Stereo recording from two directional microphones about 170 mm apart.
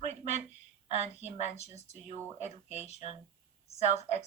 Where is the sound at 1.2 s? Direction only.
40° left (ahead or behind).